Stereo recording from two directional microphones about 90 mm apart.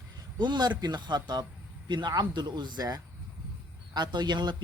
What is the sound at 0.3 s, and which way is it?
Speech, 55° right (ahead or behind).